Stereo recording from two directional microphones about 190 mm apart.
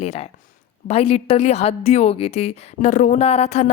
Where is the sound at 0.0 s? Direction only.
35° left (ahead or behind).